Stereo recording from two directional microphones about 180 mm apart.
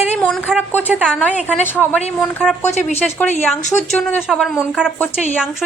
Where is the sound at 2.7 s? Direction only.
40° left (ahead or behind).